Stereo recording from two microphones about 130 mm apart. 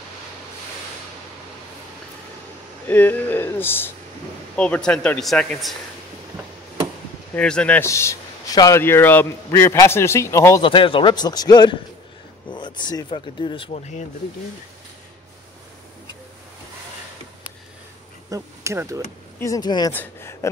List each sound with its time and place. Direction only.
2.9 s speech: 15° left (ahead or behind)
7.3 s speech: 10° left (ahead or behind)
7.8 s a man's voice: 20° left (ahead or behind)
10.6 s speech: 40° left (ahead or behind)
13.7 s speech: 65° left (ahead or behind)
18.3 s speech: 20° right (ahead or behind)
19.4 s speech: 30° left (ahead or behind)
19.9 s speech: 15° left (ahead or behind)